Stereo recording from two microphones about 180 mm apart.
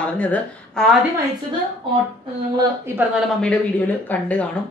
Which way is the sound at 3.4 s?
5° left (ahead or behind).